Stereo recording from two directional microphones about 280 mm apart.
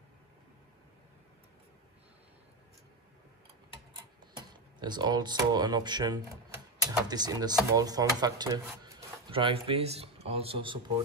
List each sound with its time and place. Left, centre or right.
4.4 s speech: centre